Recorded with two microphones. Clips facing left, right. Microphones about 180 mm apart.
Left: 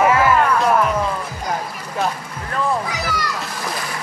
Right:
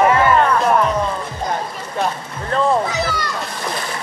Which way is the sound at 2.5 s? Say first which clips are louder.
Right 5 dB; 25° right (ahead or behind).